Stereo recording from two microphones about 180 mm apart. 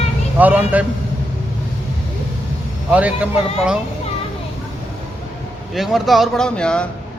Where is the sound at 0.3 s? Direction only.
10° right (ahead or behind).